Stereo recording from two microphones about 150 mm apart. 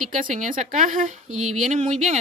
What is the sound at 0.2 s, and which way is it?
Speech, 60° right (ahead or behind).